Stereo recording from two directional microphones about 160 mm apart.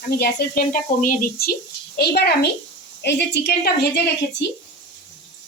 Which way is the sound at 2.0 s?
85° left.